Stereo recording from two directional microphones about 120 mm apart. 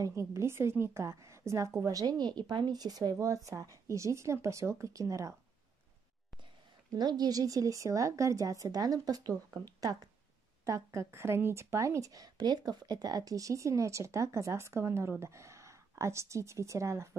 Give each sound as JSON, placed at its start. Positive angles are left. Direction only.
{"t": 0.0, "sound": "speech", "side_deg": -25}
{"t": 6.9, "sound": "a woman's voice", "side_deg": -35}